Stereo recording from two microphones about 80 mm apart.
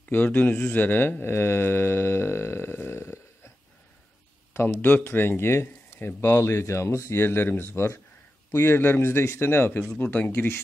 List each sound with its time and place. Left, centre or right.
0.1 s speech: left
4.6 s a man's voice: left
8.7 s speech: left